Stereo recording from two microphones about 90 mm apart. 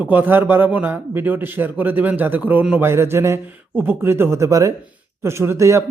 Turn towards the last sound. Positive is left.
turn(degrees=-35)  # may be behind; listen again after turning